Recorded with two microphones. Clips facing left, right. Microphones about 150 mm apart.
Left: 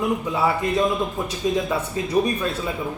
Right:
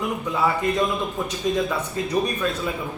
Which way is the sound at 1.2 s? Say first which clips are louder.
Even; 20° left (ahead or behind).